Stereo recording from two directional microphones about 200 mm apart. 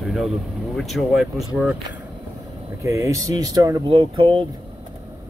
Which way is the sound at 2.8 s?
15° right (ahead or behind).